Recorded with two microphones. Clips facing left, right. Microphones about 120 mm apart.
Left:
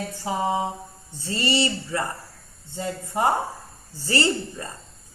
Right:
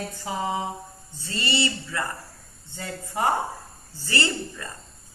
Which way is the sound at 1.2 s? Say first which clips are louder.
Left 3 dB; 35° left (ahead or behind).